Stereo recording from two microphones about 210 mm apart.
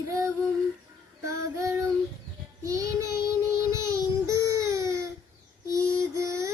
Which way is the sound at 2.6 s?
15° right (ahead or behind).